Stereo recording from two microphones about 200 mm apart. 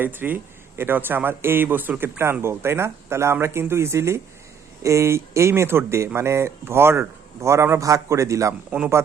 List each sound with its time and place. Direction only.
0.0 s a man's voice: 10° right (ahead or behind)